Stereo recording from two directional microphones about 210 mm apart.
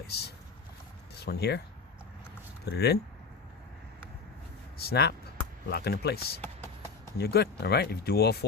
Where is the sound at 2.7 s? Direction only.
50° left (ahead or behind).